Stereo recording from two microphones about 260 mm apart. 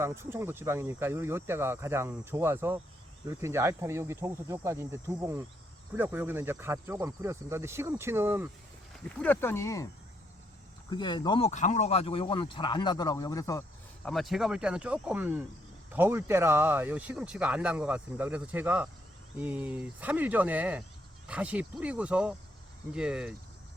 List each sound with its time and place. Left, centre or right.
0.0 s speech: centre
9.1 s speech: centre
10.8 s speech: centre
14.1 s speech: centre